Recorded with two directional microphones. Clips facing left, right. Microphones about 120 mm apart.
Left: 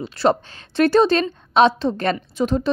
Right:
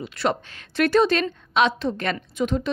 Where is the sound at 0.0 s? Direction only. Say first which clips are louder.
Left 6 dB; 30° left (ahead or behind).